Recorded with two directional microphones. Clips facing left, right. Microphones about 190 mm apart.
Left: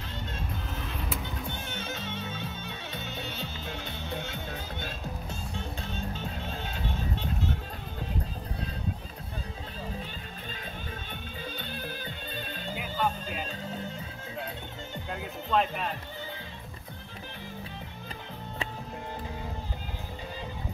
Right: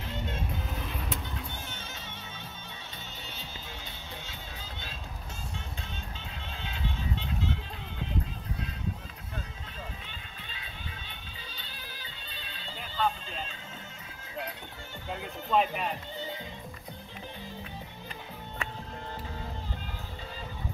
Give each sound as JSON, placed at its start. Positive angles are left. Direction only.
{"t": 1.7, "sound": "music", "side_deg": 60}
{"t": 6.1, "sound": "music", "side_deg": 45}
{"t": 11.5, "sound": "music", "side_deg": 55}
{"t": 12.7, "sound": "music", "side_deg": 10}
{"t": 15.0, "sound": "music", "side_deg": -5}